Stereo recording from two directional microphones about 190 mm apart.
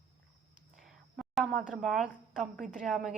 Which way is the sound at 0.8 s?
Centre (ahead or behind).